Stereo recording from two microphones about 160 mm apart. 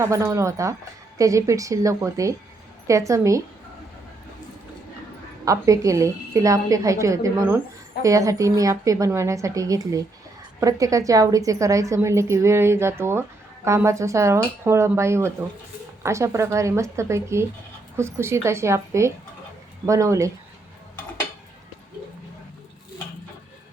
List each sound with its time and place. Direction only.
0.0 s a woman's voice: 20° right (ahead or behind)
5.5 s a woman's voice: 20° right (ahead or behind)